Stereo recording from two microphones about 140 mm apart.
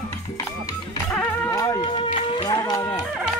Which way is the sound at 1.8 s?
35° left (ahead or behind).